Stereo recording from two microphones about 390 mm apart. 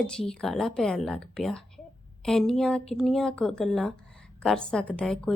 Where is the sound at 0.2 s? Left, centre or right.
Centre.